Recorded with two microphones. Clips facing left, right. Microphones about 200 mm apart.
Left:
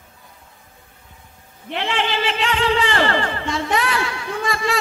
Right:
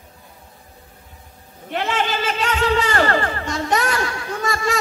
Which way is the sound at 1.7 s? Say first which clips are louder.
Right 1 dB; 45° right (ahead or behind).